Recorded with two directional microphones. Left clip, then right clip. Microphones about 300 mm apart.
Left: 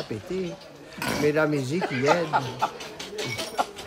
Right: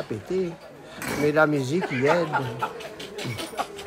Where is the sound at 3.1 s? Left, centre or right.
Left.